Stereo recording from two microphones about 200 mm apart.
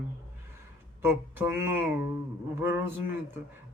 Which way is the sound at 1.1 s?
10° right (ahead or behind).